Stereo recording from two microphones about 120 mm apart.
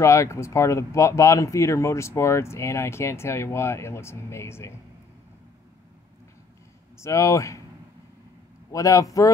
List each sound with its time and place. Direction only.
0.0 s speech: 25° left (ahead or behind)
7.0 s speech: 25° left (ahead or behind)
8.7 s speech: 30° left (ahead or behind)